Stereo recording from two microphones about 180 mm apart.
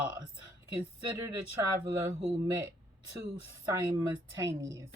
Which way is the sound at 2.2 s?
30° right (ahead or behind).